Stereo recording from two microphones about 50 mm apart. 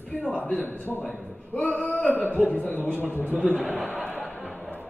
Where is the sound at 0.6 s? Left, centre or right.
Left.